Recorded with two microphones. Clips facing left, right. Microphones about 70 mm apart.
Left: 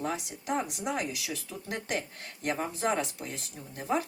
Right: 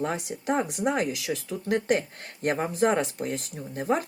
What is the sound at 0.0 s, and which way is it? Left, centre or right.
Speech, right.